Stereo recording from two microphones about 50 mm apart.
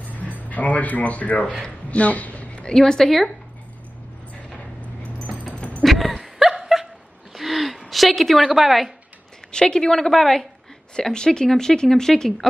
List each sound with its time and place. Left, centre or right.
0.0 s speech: left
1.9 s a sound: left
2.7 s speech: centre
5.4 s keys jangling: left
5.9 s a sound: centre
7.3 s gasp: centre
7.9 s a woman's voice: centre
8.5 s a woman's voice: centre
9.5 s speech: centre